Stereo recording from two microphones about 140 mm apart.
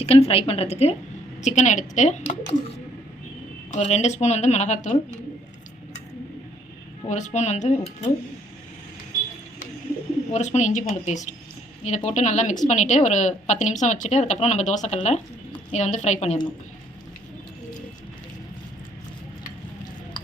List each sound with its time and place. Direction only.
0.0 s a woman's voice: 45° left (ahead or behind)
1.4 s a woman's voice: 60° left (ahead or behind)
7.1 s a woman's voice: 60° left (ahead or behind)
10.3 s a woman's voice: 55° left (ahead or behind)